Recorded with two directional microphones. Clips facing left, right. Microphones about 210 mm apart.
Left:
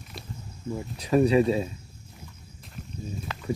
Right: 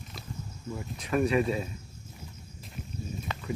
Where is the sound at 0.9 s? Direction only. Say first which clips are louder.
Left 5 dB; 35° left (ahead or behind).